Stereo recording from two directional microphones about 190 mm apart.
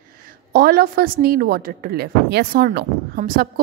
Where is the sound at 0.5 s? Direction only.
50° right (ahead or behind).